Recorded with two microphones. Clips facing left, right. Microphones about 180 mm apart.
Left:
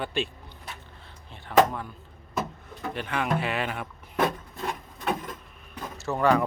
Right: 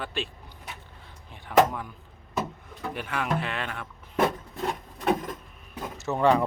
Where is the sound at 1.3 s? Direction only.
10° right (ahead or behind).